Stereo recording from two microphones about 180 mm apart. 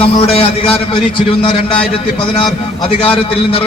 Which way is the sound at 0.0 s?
35° left (ahead or behind).